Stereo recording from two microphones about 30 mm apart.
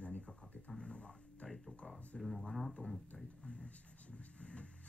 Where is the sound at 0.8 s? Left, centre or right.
Left.